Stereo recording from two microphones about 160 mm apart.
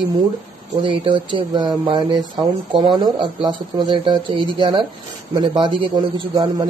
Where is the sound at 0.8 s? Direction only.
30° right (ahead or behind).